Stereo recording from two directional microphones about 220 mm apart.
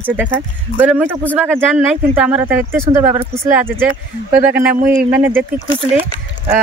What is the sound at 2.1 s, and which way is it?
Speech, 5° right (ahead or behind).